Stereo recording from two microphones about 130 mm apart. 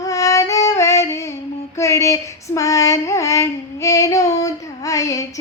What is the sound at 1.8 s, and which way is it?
Female singing, 25° left (ahead or behind).